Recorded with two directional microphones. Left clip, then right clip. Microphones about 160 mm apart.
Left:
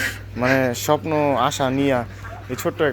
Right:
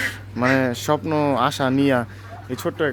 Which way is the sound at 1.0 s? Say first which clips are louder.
Left 1 dB; 40° right (ahead or behind).